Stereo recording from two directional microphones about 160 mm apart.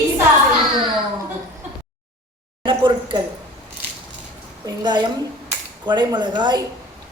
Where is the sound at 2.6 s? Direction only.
30° right (ahead or behind).